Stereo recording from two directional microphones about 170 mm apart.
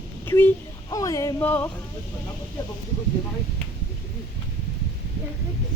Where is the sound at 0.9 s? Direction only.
20° left (ahead or behind).